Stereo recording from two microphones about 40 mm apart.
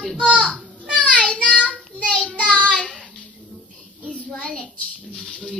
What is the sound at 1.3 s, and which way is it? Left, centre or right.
Child singing, left.